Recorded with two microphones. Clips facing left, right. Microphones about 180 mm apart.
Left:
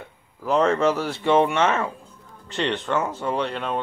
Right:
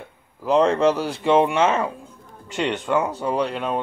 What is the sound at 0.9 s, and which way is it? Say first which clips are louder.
Speech: right 1 dB; 35° right (ahead or behind).